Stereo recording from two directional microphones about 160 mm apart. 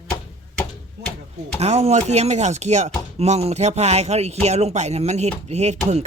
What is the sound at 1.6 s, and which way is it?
Speech, 45° right (ahead or behind).